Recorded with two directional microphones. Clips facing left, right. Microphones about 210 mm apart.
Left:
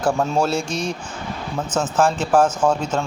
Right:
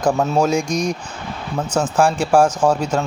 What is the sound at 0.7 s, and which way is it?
Speech, 40° right (ahead or behind).